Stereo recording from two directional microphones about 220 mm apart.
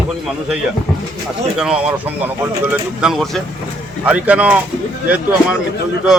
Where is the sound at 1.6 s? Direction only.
5° right (ahead or behind).